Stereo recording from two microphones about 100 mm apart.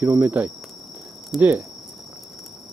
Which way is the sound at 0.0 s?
20° right (ahead or behind).